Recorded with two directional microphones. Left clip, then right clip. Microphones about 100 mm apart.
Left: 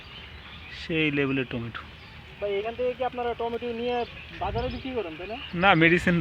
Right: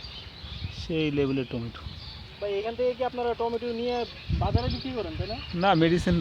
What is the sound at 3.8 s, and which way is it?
Speech, 40° right (ahead or behind).